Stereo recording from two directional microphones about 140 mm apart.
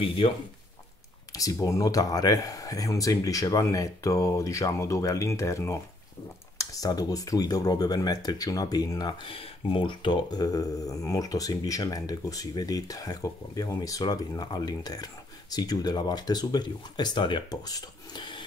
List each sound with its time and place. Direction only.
0.0 s speech: 40° left (ahead or behind)
1.3 s speech: 25° left (ahead or behind)